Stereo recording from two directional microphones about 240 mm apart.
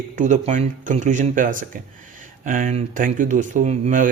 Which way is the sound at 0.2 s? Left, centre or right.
Right.